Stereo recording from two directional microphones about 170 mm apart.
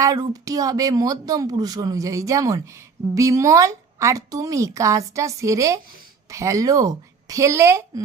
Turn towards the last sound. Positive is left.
turn(degrees=-15)  # may be behind; listen again after turning